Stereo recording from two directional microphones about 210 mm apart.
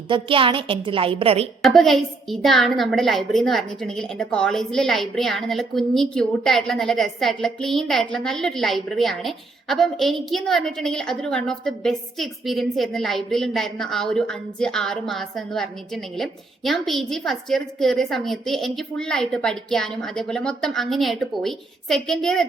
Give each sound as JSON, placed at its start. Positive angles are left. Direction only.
{"t": 0.1, "sound": "a woman's voice", "side_deg": -25}
{"t": 1.6, "sound": "a woman's voice", "side_deg": 0}